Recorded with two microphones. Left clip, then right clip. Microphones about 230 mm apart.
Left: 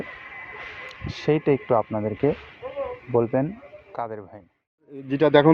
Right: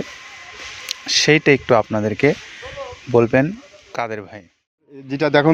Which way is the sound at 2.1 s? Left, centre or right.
Right.